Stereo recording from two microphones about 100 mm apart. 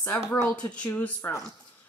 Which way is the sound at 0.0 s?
25° left (ahead or behind).